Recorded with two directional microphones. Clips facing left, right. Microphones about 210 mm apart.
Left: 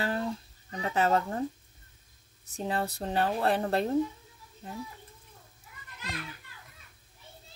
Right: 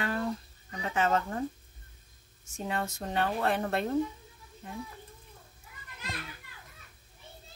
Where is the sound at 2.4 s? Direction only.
35° left (ahead or behind).